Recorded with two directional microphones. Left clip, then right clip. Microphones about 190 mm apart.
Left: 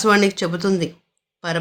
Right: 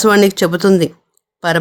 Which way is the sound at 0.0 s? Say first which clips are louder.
Right 6 dB; 50° right (ahead or behind).